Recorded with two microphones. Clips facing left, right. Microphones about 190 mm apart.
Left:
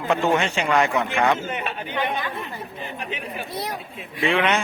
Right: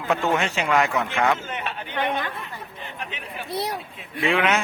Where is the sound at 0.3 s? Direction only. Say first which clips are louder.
Left 1 dB; centre (ahead or behind).